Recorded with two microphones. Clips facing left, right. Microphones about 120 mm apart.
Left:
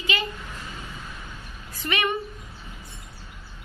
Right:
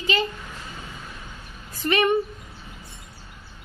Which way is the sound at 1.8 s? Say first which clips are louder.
Right 6 dB; 40° right (ahead or behind).